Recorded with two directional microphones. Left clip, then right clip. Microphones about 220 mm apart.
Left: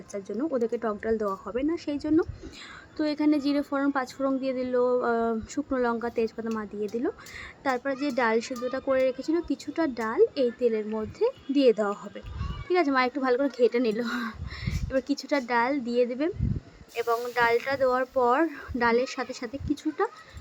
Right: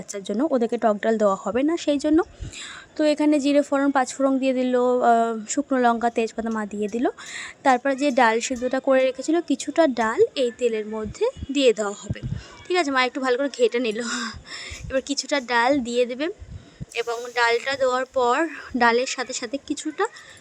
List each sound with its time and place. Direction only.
0.1 s a woman's voice: 40° right (ahead or behind)